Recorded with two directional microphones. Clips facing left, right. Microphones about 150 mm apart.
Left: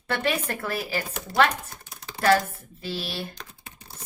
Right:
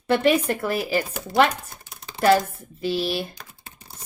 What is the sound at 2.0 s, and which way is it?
Computer keyboard, 20° right (ahead or behind).